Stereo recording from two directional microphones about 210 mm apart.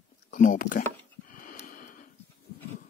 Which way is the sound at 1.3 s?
40° left (ahead or behind).